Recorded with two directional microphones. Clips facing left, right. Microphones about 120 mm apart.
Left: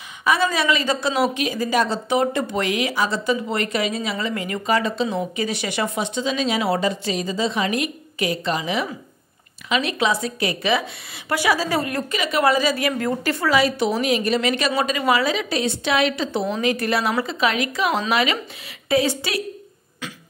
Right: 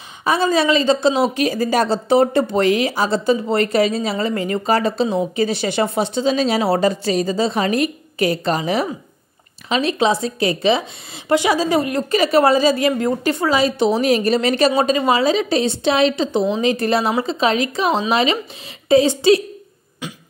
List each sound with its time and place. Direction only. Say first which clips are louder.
0.2 s a woman's voice: right 4 dB; 30° right (ahead or behind)
1.3 s a woman's voice: right 4 dB; 40° right (ahead or behind); by 12.1 s 20° right (ahead or behind)
12.1 s a woman's voice: right 6 dB; 35° right (ahead or behind)